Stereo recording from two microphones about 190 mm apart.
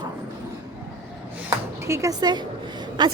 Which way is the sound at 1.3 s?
15° right (ahead or behind).